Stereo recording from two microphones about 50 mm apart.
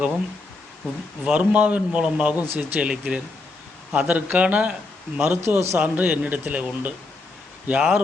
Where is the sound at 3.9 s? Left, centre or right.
Right.